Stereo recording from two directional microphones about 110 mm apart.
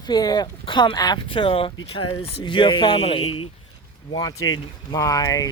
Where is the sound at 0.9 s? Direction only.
35° left (ahead or behind).